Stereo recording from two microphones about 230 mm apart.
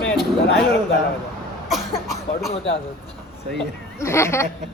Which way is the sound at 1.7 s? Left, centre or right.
Centre.